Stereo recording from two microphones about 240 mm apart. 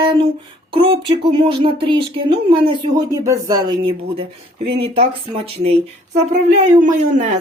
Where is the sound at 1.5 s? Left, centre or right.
Right.